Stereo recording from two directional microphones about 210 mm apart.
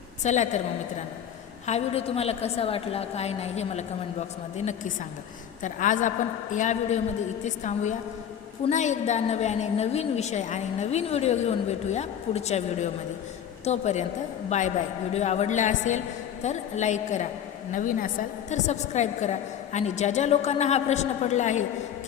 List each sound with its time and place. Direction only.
0.2 s a woman's voice: 35° left (ahead or behind)
1.6 s a woman's voice: 30° left (ahead or behind)